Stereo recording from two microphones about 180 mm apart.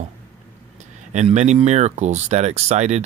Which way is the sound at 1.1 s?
40° right (ahead or behind).